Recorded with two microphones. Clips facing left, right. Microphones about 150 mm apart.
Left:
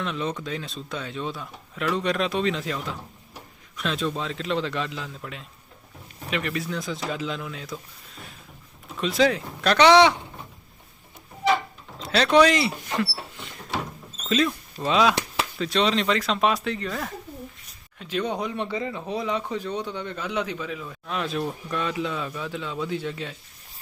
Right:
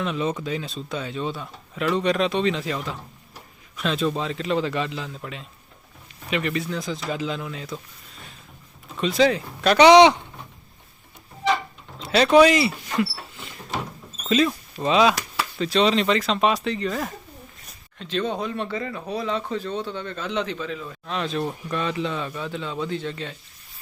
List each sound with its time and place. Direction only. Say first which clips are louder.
0.0 s speech: right 3 dB; 5° right (ahead or behind)
9.0 s speech: right 2 dB; centre (ahead or behind)
9.7 s speech: right 4 dB; 15° right (ahead or behind)
11.4 s a sound: left 1 dB; centre (ahead or behind)
13.3 s rodents: even; centre (ahead or behind)
14.3 s speech: right 3 dB; centre (ahead or behind)
18.0 s speech: right 1 dB; 10° left (ahead or behind)